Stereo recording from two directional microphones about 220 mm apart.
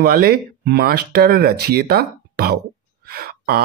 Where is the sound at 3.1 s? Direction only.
45° right (ahead or behind).